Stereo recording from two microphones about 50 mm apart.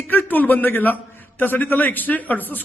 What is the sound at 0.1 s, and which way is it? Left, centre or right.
A man's voice, left.